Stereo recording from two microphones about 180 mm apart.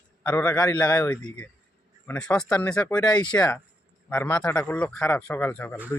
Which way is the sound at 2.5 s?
20° left (ahead or behind).